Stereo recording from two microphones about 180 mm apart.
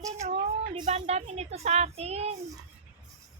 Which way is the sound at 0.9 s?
40° right (ahead or behind).